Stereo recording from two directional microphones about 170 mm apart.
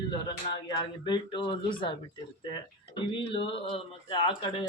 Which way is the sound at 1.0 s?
25° left (ahead or behind).